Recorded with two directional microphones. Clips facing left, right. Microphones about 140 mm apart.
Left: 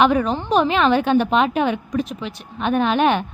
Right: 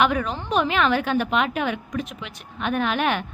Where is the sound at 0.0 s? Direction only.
30° left (ahead or behind).